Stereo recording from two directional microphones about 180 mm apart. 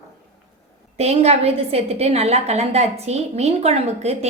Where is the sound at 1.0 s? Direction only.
35° right (ahead or behind).